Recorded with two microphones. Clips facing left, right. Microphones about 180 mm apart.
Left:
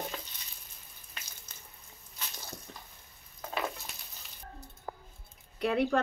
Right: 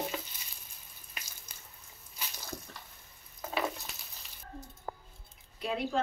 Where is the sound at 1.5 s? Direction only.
10° right (ahead or behind).